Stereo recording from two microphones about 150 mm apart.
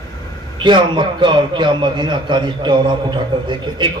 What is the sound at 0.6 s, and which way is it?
A man's voice, 30° right (ahead or behind).